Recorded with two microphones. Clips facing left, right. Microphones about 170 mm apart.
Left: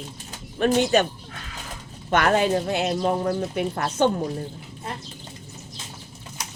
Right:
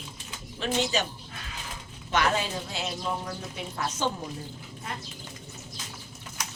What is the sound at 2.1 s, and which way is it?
Speech, 55° left (ahead or behind).